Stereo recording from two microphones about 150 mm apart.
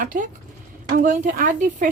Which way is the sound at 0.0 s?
60° right (ahead or behind).